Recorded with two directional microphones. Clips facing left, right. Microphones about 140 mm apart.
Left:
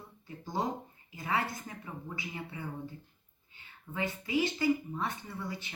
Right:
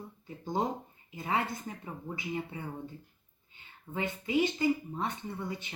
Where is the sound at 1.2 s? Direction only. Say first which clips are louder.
Right 1 dB; 25° right (ahead or behind).